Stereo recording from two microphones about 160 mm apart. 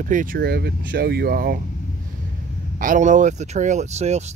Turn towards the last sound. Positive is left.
turn(degrees=-45)  # may be behind; listen again after turning